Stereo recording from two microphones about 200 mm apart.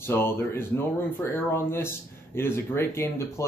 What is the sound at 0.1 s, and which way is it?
Speech, 10° left (ahead or behind).